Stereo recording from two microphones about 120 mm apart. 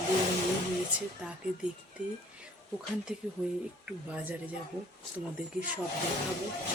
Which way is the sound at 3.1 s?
5° right (ahead or behind).